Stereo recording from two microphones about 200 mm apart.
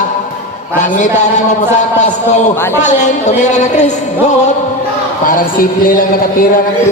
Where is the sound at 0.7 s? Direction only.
40° left (ahead or behind).